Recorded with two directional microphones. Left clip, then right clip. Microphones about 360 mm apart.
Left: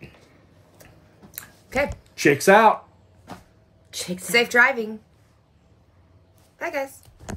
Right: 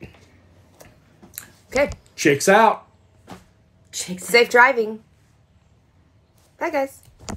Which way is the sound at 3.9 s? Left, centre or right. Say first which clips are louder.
Even; centre.